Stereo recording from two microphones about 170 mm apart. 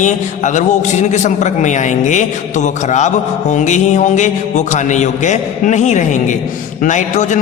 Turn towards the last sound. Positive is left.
turn(degrees=45)  # may be behind; listen again after turning